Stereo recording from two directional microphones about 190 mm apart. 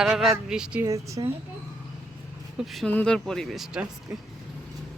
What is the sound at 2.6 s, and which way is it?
Speech, 5° left (ahead or behind).